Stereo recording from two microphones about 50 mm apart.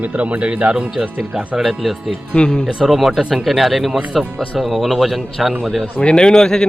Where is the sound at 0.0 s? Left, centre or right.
Right.